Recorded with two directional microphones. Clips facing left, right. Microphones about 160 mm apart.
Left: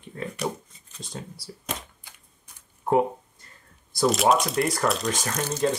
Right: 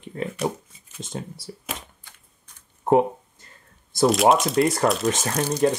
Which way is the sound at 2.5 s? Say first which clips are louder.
Left 1 dB; 10° left (ahead or behind).